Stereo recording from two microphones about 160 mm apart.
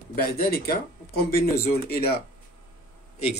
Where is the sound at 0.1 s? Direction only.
70° left (ahead or behind).